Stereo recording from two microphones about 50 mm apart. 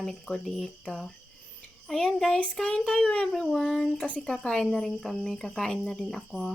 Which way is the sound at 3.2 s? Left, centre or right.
Centre.